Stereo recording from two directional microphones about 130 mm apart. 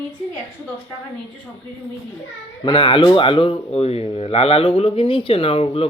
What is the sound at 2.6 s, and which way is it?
Speech, 40° left (ahead or behind).